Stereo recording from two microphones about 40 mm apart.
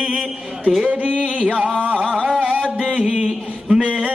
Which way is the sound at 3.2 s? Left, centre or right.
Centre.